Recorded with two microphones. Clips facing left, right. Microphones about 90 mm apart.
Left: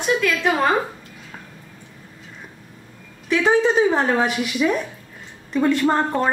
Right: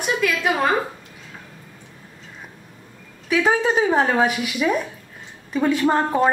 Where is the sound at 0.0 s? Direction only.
10° right (ahead or behind).